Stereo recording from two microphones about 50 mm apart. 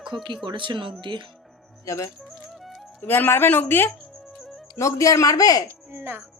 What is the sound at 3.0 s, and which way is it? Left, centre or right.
Speech, left.